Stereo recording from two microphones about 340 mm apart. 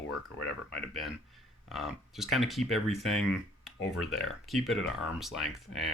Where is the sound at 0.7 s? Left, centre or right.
Centre.